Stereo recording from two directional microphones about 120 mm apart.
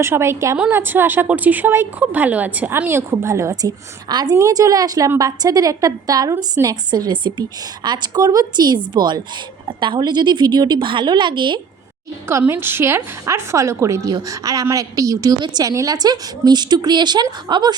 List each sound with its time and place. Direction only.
0.0 s a woman's voice: 20° right (ahead or behind); by 11.6 s 40° right (ahead or behind)
12.3 s a woman's voice: 20° right (ahead or behind); by 17.7 s 35° right (ahead or behind)